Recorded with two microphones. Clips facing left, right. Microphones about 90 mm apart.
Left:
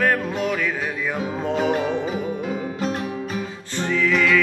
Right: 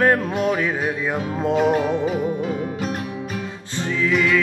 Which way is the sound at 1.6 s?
Centre (ahead or behind).